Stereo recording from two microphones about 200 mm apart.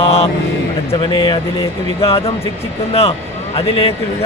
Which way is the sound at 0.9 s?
25° left (ahead or behind).